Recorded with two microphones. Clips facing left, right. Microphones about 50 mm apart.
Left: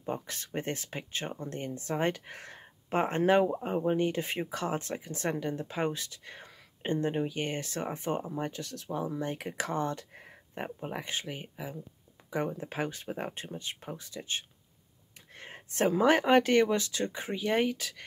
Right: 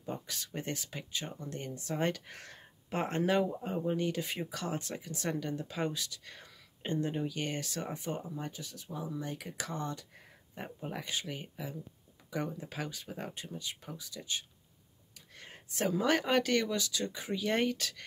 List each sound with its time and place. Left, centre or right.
0.0 s speech: left
2.0 s speech: left
8.5 s speech: left
9.1 s speech: left
11.2 s speech: centre; by 14.4 s left
15.3 s a sound: left
15.7 s speech: left
17.4 s speech: centre